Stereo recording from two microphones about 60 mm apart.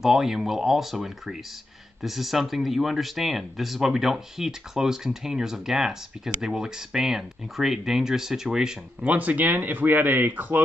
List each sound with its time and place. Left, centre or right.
0.0 s speech: centre
9.0 s speech: right